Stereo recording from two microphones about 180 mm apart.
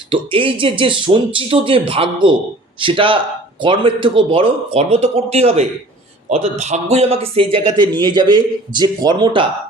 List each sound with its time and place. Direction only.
0.1 s speech: 30° right (ahead or behind)